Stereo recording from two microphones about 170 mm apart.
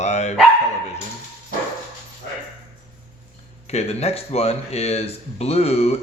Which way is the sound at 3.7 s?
40° left (ahead or behind).